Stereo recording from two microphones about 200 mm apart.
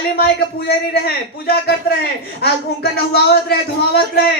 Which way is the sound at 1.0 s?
55° left (ahead or behind).